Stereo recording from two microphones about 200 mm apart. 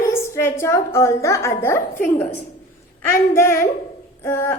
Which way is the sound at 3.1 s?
15° left (ahead or behind).